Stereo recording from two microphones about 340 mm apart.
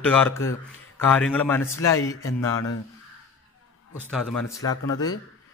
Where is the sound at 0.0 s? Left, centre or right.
Centre.